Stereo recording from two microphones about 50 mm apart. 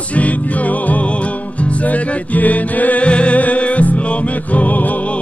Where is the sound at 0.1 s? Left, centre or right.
Left.